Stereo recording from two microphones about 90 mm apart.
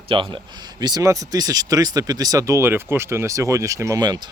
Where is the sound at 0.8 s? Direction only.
50° right (ahead or behind).